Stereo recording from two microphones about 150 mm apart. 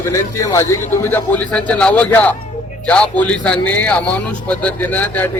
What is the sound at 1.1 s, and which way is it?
A man's voice, 10° left (ahead or behind).